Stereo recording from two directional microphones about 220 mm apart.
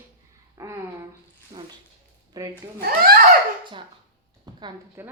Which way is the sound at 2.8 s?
40° right (ahead or behind).